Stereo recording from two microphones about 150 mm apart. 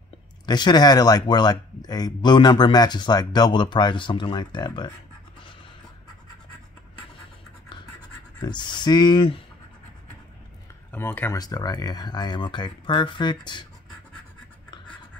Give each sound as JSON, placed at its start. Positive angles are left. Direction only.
{"t": 0.5, "sound": "speech", "side_deg": 30}
{"t": 8.4, "sound": "speech", "side_deg": 30}
{"t": 10.9, "sound": "speech", "side_deg": 15}
{"t": 11.3, "sound": "speech", "side_deg": 25}